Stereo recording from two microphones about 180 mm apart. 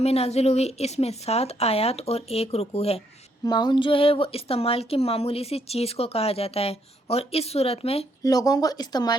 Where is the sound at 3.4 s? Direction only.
25° left (ahead or behind).